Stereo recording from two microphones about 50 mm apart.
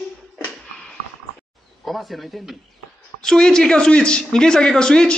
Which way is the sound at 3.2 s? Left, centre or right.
Centre.